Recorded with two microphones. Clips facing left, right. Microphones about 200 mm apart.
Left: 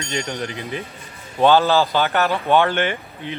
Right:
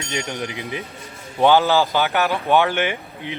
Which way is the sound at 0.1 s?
15° right (ahead or behind).